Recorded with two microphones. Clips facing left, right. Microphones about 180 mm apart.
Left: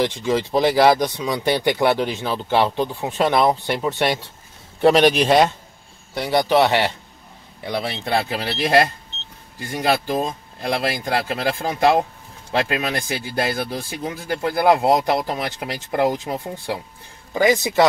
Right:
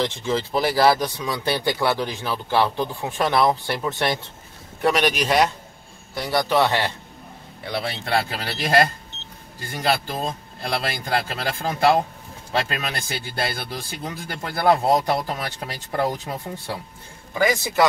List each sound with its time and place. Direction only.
0.2 s speech: 15° left (ahead or behind)
4.8 s a man's voice: 30° left (ahead or behind)
6.1 s a man's voice: 15° left (ahead or behind)